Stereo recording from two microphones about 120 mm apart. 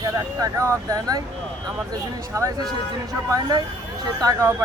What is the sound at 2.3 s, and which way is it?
Speech, 25° right (ahead or behind).